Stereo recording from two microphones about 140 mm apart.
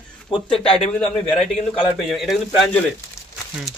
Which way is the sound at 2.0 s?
Centre (ahead or behind).